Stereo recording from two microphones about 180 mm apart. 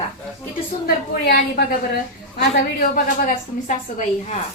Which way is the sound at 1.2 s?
60° left (ahead or behind).